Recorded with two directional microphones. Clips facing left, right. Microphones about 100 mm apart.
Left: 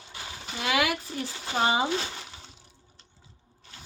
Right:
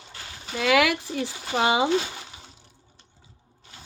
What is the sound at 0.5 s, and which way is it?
Speech, 90° right.